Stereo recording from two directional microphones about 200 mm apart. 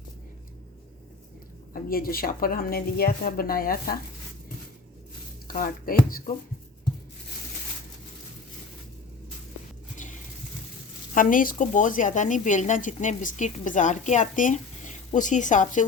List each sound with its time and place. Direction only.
1.7 s a woman's voice: 45° left (ahead or behind)
5.5 s a woman's voice: 45° left (ahead or behind)
11.1 s a woman's voice: 40° left (ahead or behind)